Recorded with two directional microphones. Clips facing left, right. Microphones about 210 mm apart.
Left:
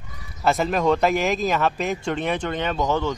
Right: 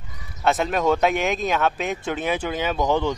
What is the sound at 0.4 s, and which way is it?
Speech, centre (ahead or behind).